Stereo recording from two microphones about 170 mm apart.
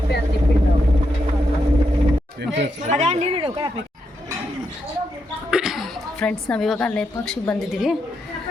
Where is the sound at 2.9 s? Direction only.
40° right (ahead or behind).